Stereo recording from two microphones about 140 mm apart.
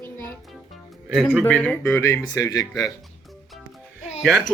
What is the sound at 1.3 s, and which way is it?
Speech, 10° left (ahead or behind).